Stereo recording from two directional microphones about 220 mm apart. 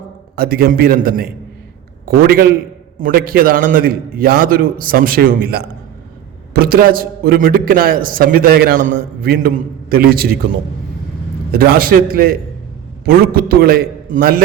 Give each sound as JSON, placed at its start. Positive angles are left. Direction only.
{"t": 0.3, "sound": "a man's voice", "side_deg": -40}
{"t": 11.5, "sound": "a man's voice", "side_deg": -45}